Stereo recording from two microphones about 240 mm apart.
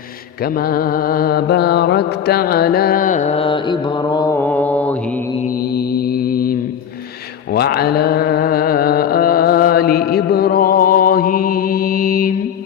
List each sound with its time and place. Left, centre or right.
0.4 s mantra: left; by 4.9 s centre
5.7 s mantra: left